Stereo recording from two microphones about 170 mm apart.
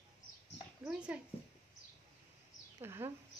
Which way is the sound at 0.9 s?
5° right (ahead or behind).